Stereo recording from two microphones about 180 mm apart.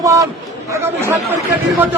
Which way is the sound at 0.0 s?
15° right (ahead or behind).